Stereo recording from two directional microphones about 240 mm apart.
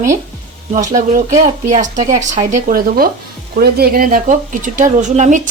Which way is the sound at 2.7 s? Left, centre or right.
Right.